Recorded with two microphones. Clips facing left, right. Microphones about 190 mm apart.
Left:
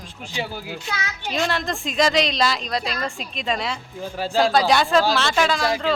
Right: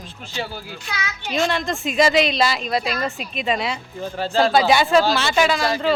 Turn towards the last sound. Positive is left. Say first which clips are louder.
# right 2 dB
turn(degrees=0)  # may be behind; listen again after turning